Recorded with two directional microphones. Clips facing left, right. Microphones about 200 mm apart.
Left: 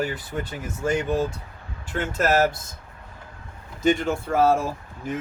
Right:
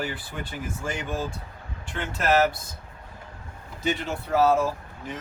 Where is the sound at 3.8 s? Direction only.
45° left (ahead or behind).